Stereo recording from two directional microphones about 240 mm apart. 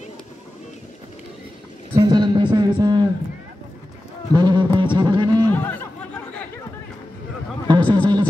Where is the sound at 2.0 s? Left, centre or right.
Centre.